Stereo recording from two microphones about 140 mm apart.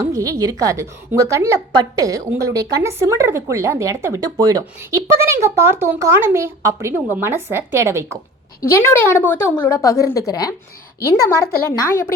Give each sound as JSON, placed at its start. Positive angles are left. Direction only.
{"t": 0.0, "sound": "speech", "side_deg": -25}
{"t": 8.6, "sound": "a woman's voice", "side_deg": 15}
{"t": 11.7, "sound": "a woman's voice", "side_deg": 20}